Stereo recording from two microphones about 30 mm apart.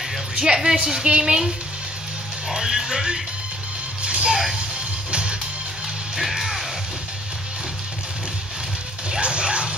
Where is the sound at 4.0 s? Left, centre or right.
Right.